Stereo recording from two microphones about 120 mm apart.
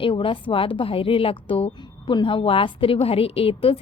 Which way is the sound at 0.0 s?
50° left (ahead or behind).